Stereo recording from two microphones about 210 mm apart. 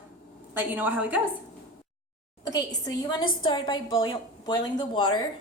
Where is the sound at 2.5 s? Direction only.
15° left (ahead or behind).